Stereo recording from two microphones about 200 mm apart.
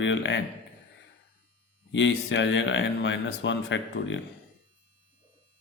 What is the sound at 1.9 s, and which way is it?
Speech, 65° left (ahead or behind).